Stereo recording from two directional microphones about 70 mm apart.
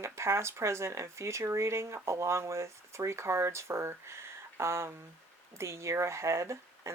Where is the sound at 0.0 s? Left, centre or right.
Right.